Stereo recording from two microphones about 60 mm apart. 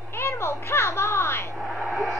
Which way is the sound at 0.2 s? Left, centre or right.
Left.